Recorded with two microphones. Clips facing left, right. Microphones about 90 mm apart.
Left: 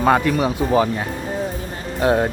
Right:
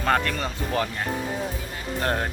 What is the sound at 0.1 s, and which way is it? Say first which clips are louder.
Speech: left 6 dB; 10° left (ahead or behind).